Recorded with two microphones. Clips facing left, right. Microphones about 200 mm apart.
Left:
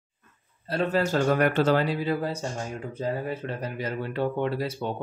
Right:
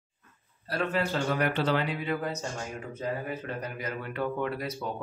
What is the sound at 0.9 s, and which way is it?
Speech, 45° left (ahead or behind).